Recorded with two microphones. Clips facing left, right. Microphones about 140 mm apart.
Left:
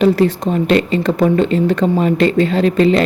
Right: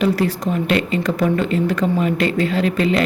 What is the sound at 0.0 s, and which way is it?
A woman's voice, 30° left (ahead or behind).